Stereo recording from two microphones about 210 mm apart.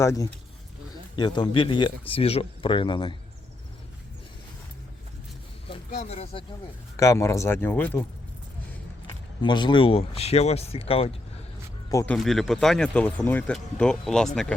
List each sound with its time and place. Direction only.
0.0 s speech: 15° left (ahead or behind)
5.6 s speech: 30° left (ahead or behind)
6.9 s speech: 15° left (ahead or behind)
9.4 s speech: 20° left (ahead or behind)
11.9 s speech: 15° left (ahead or behind)
12.1 s speech: centre (ahead or behind)